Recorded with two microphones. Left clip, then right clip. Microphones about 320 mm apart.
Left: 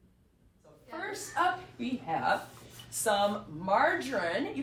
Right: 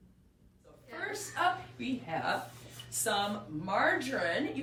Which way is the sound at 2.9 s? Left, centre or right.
Centre.